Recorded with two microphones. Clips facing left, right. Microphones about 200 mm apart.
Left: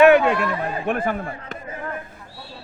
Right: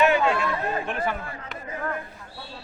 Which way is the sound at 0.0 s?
60° left (ahead or behind).